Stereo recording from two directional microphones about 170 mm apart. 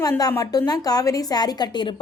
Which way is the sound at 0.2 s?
20° left (ahead or behind).